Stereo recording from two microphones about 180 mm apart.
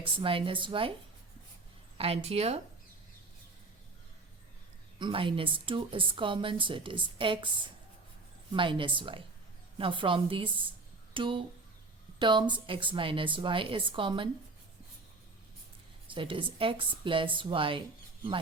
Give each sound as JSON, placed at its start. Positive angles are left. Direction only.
{"t": 0.0, "sound": "a woman's voice", "side_deg": -30}
{"t": 2.0, "sound": "speech", "side_deg": -35}
{"t": 4.9, "sound": "a woman's voice", "side_deg": -30}
{"t": 16.0, "sound": "a woman's voice", "side_deg": -30}